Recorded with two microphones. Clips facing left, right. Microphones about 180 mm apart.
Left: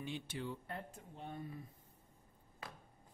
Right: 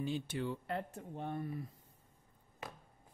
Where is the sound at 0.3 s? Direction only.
75° right (ahead or behind).